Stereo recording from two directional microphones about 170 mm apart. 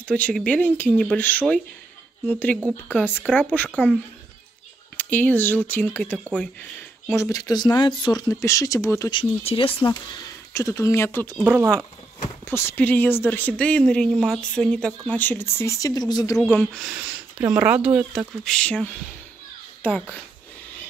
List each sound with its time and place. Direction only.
0.0 s speech: 5° left (ahead or behind)
4.9 s speech: 10° left (ahead or behind)
9.1 s speech: 35° left (ahead or behind)
10.5 s speech: 15° left (ahead or behind)
12.4 s speech: 10° left (ahead or behind)
16.5 s speech: centre (ahead or behind)